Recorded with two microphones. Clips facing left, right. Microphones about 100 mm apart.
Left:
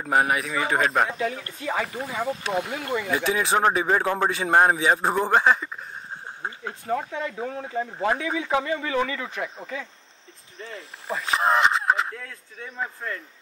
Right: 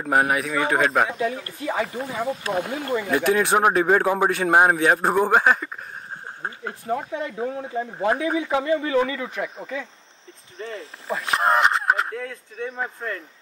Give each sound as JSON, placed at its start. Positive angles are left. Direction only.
{"t": 0.0, "sound": "a man's voice", "side_deg": 0}
{"t": 1.1, "sound": "speech", "side_deg": -25}
{"t": 3.1, "sound": "a man's voice", "side_deg": 0}
{"t": 6.9, "sound": "speech", "side_deg": -25}
{"t": 9.3, "sound": "speech", "side_deg": -15}
{"t": 10.6, "sound": "speech", "side_deg": -30}
{"t": 11.1, "sound": "speech", "side_deg": 0}
{"t": 12.2, "sound": "speech", "side_deg": -45}